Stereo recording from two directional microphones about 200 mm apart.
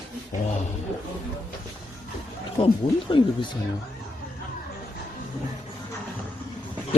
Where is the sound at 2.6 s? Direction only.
25° left (ahead or behind).